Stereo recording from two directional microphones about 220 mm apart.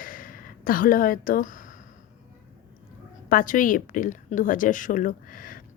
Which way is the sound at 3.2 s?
40° left (ahead or behind).